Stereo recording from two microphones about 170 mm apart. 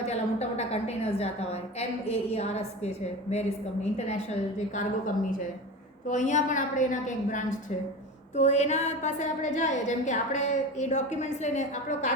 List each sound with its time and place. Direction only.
0.0 s a woman's voice: 40° left (ahead or behind)
6.1 s a woman's voice: 45° left (ahead or behind)